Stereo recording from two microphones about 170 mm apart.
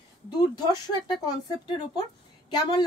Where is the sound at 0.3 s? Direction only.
25° left (ahead or behind).